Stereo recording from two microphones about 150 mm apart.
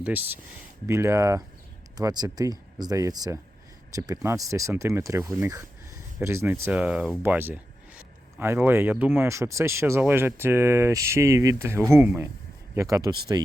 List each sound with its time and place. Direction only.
0.0 s speech: 10° right (ahead or behind)